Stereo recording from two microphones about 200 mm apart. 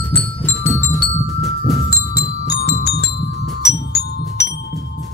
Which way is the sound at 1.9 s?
50° left (ahead or behind).